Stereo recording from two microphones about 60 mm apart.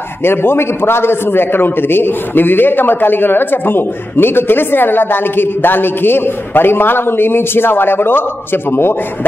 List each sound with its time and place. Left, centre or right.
0.2 s a man's voice: left